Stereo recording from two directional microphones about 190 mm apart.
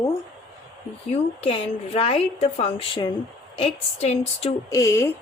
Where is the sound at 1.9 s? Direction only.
30° left (ahead or behind).